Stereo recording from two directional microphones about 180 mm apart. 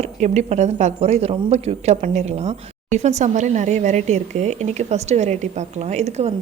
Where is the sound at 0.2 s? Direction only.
40° right (ahead or behind).